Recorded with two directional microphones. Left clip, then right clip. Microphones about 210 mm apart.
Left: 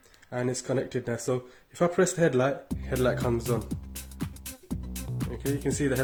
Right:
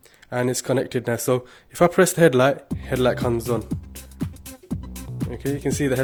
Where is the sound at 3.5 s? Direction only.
Centre (ahead or behind).